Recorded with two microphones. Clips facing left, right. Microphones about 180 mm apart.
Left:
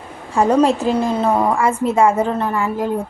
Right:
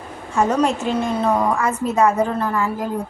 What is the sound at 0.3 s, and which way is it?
Speech, 35° left (ahead or behind).